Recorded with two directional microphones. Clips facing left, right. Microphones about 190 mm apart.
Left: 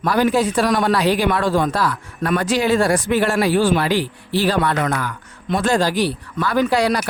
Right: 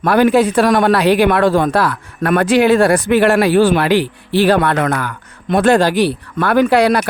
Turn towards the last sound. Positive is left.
turn(degrees=-60)  # may be behind; listen again after turning